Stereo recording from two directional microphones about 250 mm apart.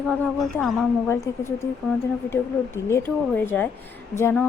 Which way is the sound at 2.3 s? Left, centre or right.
Centre.